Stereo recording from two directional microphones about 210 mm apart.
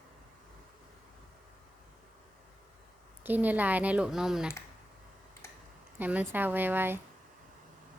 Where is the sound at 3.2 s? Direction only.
10° right (ahead or behind).